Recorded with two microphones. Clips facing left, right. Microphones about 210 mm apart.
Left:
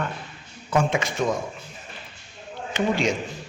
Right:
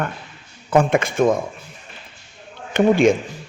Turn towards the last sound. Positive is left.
turn(degrees=-55)  # may be behind; listen again after turning